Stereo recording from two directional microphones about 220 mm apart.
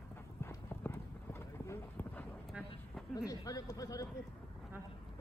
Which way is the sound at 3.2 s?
15° left (ahead or behind).